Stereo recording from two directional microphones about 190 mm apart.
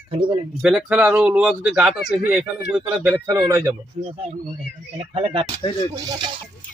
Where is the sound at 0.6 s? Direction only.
5° right (ahead or behind).